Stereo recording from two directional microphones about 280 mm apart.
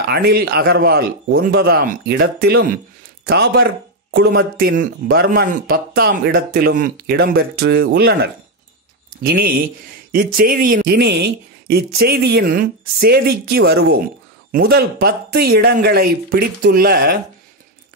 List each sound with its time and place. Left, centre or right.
0.1 s a man's voice: right